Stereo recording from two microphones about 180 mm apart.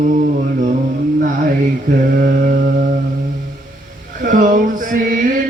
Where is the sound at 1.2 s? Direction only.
50° right (ahead or behind).